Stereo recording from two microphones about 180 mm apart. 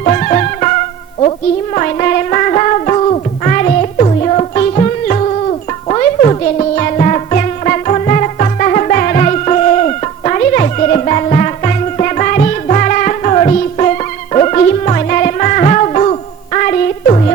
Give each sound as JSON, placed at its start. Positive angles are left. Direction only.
{"t": 0.0, "sound": "music", "side_deg": 40}
{"t": 1.7, "sound": "music", "side_deg": 40}